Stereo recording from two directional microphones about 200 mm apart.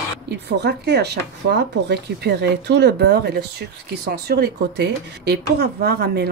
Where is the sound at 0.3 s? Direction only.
55° right (ahead or behind).